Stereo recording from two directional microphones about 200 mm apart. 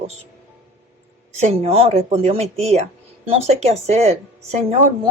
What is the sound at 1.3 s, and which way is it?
Speech, 30° right (ahead or behind).